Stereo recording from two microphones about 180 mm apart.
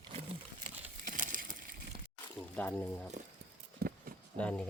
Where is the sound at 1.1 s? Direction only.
45° right (ahead or behind).